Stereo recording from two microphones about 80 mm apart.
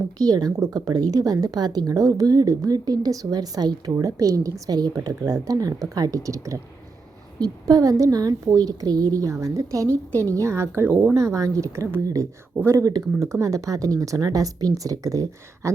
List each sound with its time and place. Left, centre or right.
0.2 s a woman's voice: right
10.8 s speech: right
11.1 s a woman's voice: right